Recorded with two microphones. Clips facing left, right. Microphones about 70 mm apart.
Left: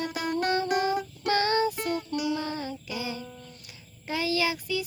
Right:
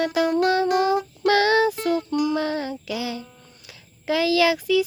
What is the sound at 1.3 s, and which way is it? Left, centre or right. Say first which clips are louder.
Music: right 6 dB; right.